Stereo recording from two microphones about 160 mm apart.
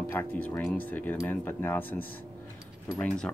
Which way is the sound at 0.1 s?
10° left (ahead or behind).